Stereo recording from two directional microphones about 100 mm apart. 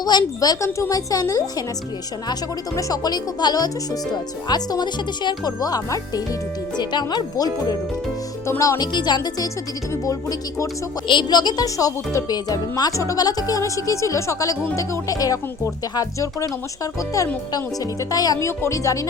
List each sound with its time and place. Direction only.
0.0 s speech: 45° left (ahead or behind)
2.7 s speech: 40° left (ahead or behind)
8.4 s speech: 30° left (ahead or behind)
8.9 s speech: 50° left (ahead or behind)
9.9 s speech: 35° left (ahead or behind)
11.1 s speech: 45° left (ahead or behind)